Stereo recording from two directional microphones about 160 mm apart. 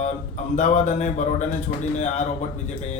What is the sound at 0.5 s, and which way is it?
Speech, 45° left (ahead or behind).